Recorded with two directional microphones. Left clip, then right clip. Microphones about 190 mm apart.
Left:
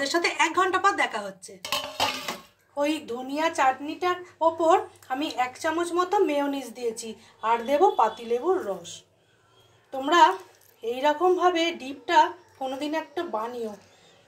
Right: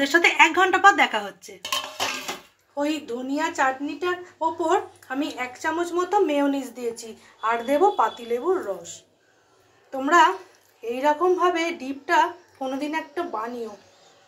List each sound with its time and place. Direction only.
0.0 s a woman's voice: 25° right (ahead or behind)
2.7 s speech: 5° left (ahead or behind)